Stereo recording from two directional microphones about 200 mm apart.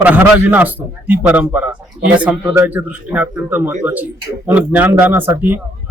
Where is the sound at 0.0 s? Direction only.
10° right (ahead or behind).